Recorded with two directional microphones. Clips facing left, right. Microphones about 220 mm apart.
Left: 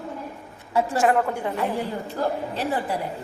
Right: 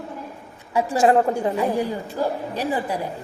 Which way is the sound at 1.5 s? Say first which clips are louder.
Right 4 dB; 15° right (ahead or behind).